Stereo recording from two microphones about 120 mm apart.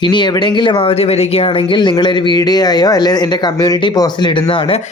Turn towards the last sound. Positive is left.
turn(degrees=45)  # may be behind; listen again after turning